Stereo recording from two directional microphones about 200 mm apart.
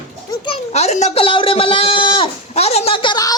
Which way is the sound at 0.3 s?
25° left (ahead or behind).